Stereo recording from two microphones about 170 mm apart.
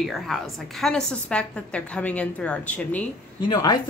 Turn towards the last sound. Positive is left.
turn(degrees=25)  # may be behind; listen again after turning